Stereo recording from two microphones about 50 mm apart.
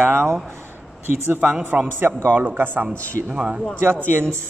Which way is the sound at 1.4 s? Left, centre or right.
Right.